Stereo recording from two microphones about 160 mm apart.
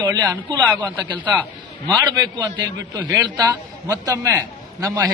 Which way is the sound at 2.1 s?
25° right (ahead or behind).